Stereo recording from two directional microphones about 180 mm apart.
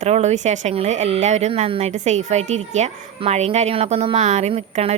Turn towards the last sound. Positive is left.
turn(degrees=-35)  # may be behind; listen again after turning